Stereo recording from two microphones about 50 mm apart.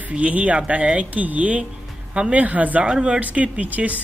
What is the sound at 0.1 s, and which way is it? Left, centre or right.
Speech, right.